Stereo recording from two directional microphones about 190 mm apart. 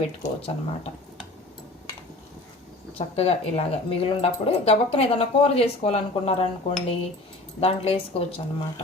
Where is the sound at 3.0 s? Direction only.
30° left (ahead or behind).